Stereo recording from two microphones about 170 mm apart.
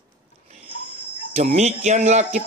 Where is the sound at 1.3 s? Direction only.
40° right (ahead or behind).